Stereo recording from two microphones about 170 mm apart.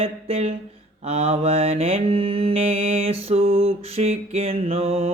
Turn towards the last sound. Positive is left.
turn(degrees=-35)  # may be behind; listen again after turning